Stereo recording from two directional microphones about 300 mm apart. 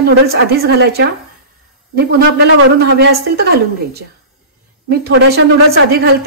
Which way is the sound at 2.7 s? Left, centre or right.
Right.